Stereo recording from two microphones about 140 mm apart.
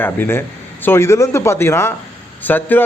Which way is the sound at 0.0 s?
15° left (ahead or behind).